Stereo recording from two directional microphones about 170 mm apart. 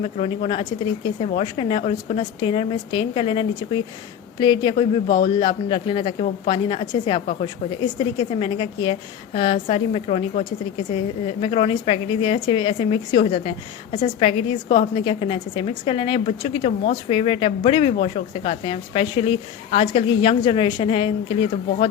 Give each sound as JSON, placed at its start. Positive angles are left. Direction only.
{"t": 0.0, "sound": "a woman's voice", "side_deg": 30}